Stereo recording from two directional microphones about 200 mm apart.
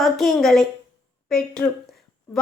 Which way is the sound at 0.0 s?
Centre (ahead or behind).